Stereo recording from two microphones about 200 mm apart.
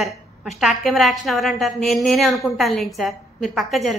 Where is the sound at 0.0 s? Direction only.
Centre (ahead or behind).